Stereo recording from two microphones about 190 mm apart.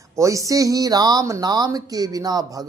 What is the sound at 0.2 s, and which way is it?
Speech, 15° right (ahead or behind).